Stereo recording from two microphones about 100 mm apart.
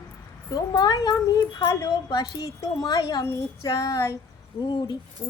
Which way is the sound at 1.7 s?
35° left (ahead or behind).